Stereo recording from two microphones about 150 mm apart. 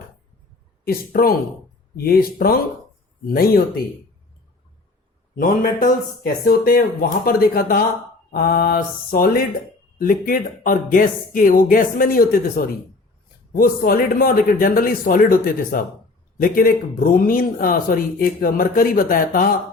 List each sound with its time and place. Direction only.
0.9 s speech: 90° left
2.0 s mantra: 85° left
5.4 s speech: 80° left
8.3 s mantra: 90° left; by 9.5 s 75° left (ahead or behind)
10.0 s speech: 70° left (ahead or behind)